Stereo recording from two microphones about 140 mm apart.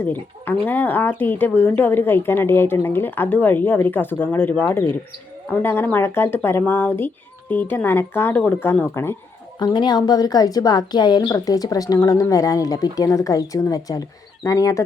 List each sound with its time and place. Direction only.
0.0 s speech: 15° left (ahead or behind)
9.6 s a woman's voice: 30° left (ahead or behind)